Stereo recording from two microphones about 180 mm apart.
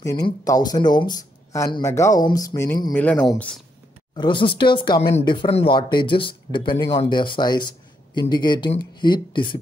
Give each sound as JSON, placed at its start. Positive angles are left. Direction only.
{"t": 0.0, "sound": "speech", "side_deg": 15}
{"t": 4.2, "sound": "speech", "side_deg": 25}